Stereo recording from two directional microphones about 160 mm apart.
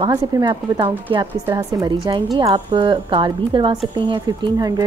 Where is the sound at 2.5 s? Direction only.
30° right (ahead or behind).